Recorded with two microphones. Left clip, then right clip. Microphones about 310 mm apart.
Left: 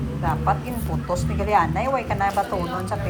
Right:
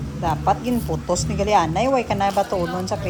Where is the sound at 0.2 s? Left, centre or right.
Right.